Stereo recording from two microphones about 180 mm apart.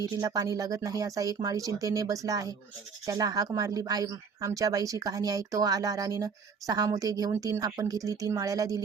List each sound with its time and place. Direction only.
0.0 s a woman's voice: 20° right (ahead or behind)